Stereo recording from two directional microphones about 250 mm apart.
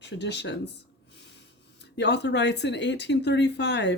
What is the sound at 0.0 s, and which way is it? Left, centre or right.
Speech, left.